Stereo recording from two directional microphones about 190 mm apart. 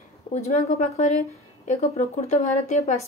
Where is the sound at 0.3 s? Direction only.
40° left (ahead or behind).